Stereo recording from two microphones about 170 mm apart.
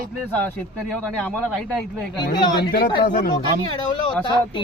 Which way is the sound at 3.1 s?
55° left (ahead or behind).